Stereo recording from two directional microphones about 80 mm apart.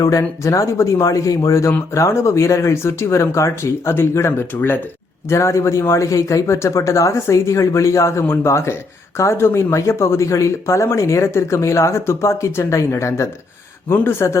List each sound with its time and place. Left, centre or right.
0.0 s speech: left
5.3 s speech: left